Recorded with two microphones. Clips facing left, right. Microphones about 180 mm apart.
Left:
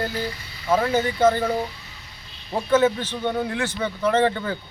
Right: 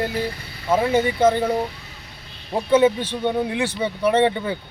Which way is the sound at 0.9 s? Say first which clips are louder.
Right 3 dB; 25° right (ahead or behind).